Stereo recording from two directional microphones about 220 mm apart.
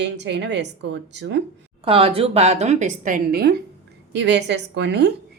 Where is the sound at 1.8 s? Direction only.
25° right (ahead or behind).